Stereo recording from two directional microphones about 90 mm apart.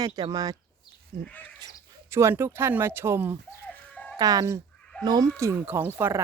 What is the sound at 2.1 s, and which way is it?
Speech, 30° right (ahead or behind).